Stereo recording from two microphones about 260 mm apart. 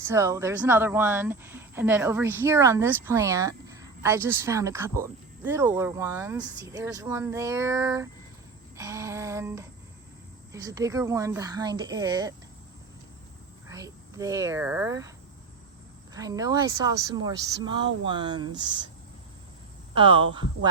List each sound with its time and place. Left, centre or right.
0.1 s speech: centre
8.7 s a sound: centre
10.5 s speech: centre
13.7 s speech: centre
16.1 s speech: centre
19.9 s speech: centre